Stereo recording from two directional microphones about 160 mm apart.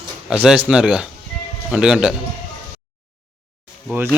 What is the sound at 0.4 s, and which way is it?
Speech, 5° right (ahead or behind).